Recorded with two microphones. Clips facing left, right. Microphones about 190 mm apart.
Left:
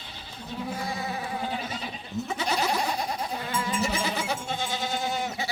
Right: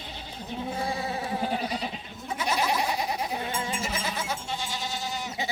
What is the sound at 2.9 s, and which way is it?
Goat, 10° right (ahead or behind).